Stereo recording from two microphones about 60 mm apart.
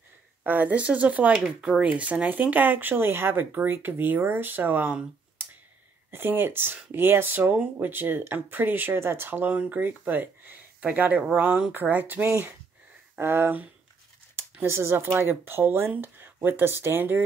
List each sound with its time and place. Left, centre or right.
0.4 s speech: right
1.3 s speech: centre
1.8 s speech: right
14.7 s speech: right